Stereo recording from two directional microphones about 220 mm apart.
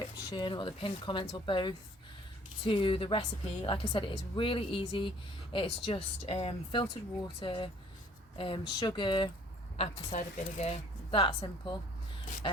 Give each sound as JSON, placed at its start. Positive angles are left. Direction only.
{"t": 0.0, "sound": "speech", "side_deg": 20}